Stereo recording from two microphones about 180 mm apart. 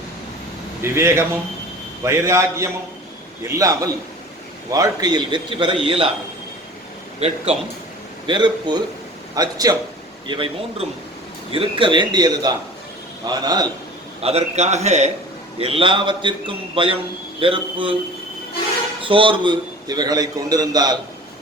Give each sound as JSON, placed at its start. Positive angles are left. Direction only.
{"t": 0.8, "sound": "a man's voice", "side_deg": -15}
{"t": 7.2, "sound": "a man's voice", "side_deg": -35}
{"t": 8.3, "sound": "a man's voice", "side_deg": -25}
{"t": 14.2, "sound": "a man's voice", "side_deg": -35}
{"t": 19.0, "sound": "a man's voice", "side_deg": -30}